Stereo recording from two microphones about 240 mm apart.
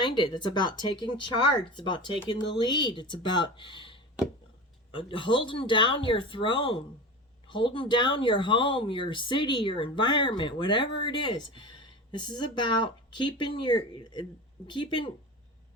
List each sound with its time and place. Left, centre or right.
0.0 s speech: centre